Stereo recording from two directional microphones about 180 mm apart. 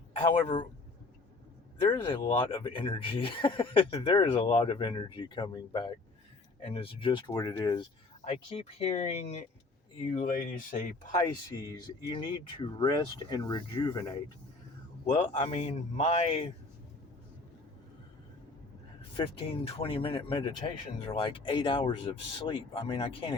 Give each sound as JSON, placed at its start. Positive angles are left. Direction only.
{"t": 0.2, "sound": "speech", "side_deg": 25}
{"t": 1.9, "sound": "speech", "side_deg": 30}
{"t": 8.2, "sound": "speech", "side_deg": 35}
{"t": 10.2, "sound": "speech", "side_deg": 50}
{"t": 11.2, "sound": "speech", "side_deg": 20}
{"t": 15.0, "sound": "speech", "side_deg": 45}
{"t": 19.1, "sound": "speech", "side_deg": 30}